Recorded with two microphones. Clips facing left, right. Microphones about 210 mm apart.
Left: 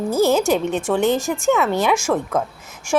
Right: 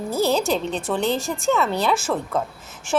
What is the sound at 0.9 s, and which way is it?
A woman's voice, 15° left (ahead or behind).